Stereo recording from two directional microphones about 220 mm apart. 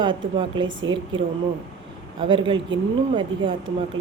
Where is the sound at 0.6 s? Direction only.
60° right (ahead or behind).